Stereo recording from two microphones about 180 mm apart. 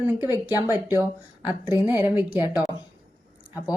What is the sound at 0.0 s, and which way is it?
Speech, 15° right (ahead or behind).